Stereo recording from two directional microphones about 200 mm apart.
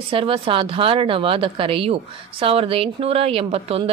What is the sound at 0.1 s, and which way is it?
A woman's voice, 25° right (ahead or behind).